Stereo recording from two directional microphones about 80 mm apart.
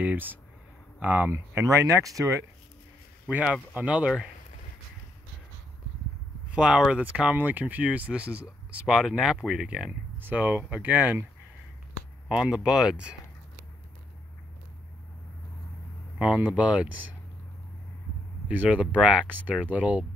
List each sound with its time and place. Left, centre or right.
0.0 s speech: right
1.3 s speech: right
3.7 s speech: centre
6.5 s speech: centre
6.9 s speech: centre
10.1 s speech: right
12.3 s speech: centre
16.3 s speech: centre
18.5 s speech: centre